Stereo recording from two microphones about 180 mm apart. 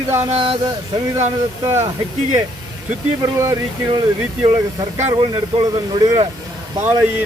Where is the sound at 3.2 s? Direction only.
15° right (ahead or behind).